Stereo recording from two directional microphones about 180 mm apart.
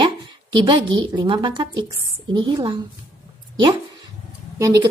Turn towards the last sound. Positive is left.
turn(degrees=-20)  # may be behind; listen again after turning